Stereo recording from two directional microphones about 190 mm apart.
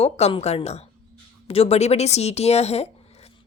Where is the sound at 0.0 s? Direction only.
30° left (ahead or behind).